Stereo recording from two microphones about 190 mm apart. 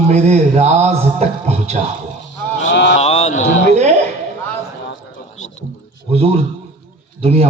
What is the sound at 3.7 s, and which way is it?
Speech, 35° right (ahead or behind).